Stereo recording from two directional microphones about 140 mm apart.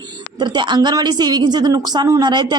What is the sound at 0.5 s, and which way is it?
Speech, 30° right (ahead or behind).